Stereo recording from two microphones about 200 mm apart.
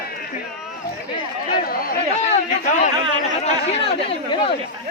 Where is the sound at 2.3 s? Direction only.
35° left (ahead or behind).